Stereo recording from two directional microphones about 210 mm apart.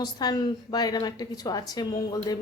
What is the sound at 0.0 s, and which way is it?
A woman's voice, 20° left (ahead or behind).